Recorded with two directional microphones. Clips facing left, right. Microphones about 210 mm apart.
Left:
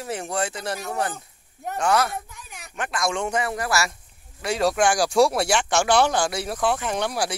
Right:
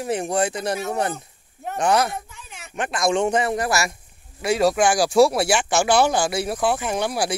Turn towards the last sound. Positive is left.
turn(degrees=-10)  # may be behind; listen again after turning